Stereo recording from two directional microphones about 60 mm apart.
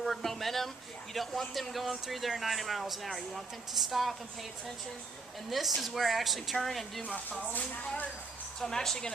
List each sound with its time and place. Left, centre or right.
0.0 s a sound: centre
1.1 s speech: centre
5.5 s speech: centre
7.3 s speech: left
8.6 s speech: centre